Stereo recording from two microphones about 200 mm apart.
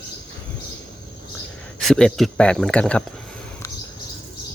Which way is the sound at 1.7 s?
Centre (ahead or behind).